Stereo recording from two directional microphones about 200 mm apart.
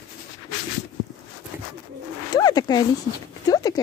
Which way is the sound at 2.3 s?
20° left (ahead or behind).